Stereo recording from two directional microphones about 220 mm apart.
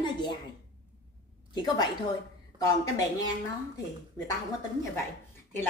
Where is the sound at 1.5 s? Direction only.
20° left (ahead or behind).